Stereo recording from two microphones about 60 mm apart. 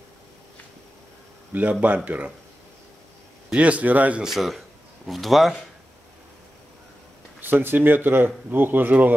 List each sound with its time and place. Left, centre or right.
1.5 s speech: right
3.4 s speech: right
4.2 s speech: centre
7.3 s speech: right